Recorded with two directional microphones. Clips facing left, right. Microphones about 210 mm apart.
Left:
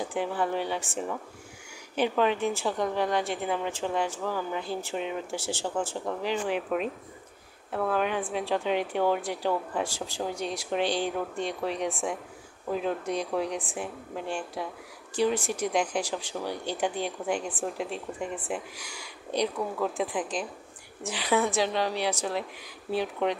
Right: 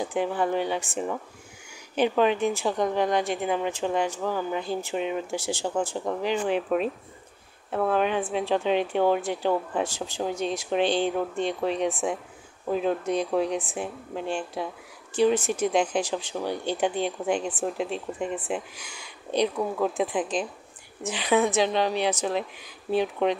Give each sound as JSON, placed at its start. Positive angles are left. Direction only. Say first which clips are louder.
{"t": 0.1, "sound": "a woman's voice", "louder": "right 4 dB", "side_deg": -15}
{"t": 7.7, "sound": "speech", "louder": "right 3 dB", "side_deg": -25}